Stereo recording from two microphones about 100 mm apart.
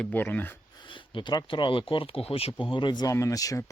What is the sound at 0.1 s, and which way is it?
Speech, 20° left (ahead or behind).